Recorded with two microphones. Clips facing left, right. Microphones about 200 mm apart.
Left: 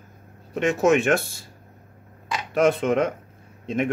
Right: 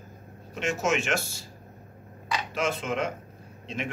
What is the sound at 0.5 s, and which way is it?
Speech, 55° left (ahead or behind).